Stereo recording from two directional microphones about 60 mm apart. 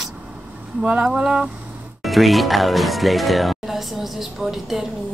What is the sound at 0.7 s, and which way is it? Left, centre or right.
Speech, centre.